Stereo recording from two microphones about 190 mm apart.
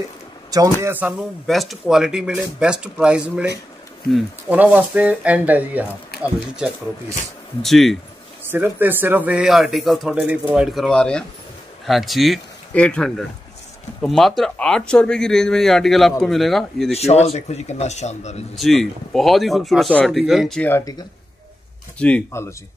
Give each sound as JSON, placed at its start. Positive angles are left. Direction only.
{"t": 0.5, "sound": "speech", "side_deg": -15}
{"t": 7.6, "sound": "speech", "side_deg": 0}
{"t": 8.5, "sound": "speech", "side_deg": -10}
{"t": 16.9, "sound": "speech", "side_deg": 35}
{"t": 18.6, "sound": "speech", "side_deg": 0}